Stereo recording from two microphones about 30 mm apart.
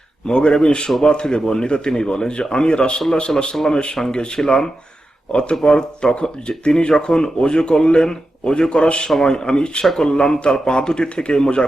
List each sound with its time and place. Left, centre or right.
0.3 s speech: left
3.5 s speech: centre
4.1 s speech: left
4.4 s speech: left
5.3 s a man's voice: left
8.7 s speech: left
9.9 s speech: centre
10.2 s speech: left